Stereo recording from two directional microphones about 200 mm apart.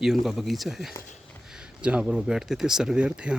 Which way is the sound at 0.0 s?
Centre (ahead or behind).